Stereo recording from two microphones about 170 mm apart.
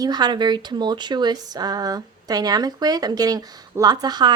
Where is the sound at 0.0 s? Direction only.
25° right (ahead or behind).